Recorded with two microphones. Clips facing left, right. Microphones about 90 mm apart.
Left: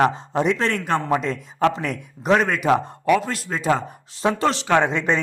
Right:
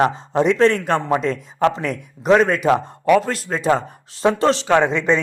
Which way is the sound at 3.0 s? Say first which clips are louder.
Right 4 dB; 40° right (ahead or behind).